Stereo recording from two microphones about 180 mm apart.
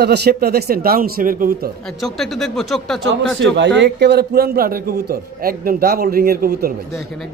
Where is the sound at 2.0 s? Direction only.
Centre (ahead or behind).